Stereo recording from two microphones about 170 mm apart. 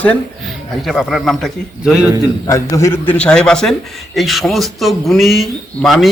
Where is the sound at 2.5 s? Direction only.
20° left (ahead or behind).